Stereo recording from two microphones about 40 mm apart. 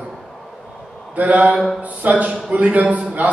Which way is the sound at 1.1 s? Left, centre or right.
Right.